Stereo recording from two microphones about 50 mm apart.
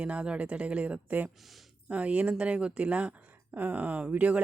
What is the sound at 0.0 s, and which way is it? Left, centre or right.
Speech, right.